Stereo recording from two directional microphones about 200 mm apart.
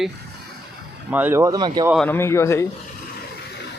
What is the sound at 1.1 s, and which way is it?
Speech, 10° right (ahead or behind).